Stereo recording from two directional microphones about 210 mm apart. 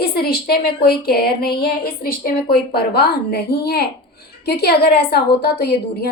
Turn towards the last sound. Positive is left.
turn(degrees=50)  # may be behind; listen again after turning